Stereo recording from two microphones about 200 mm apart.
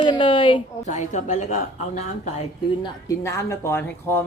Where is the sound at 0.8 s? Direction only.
35° left (ahead or behind).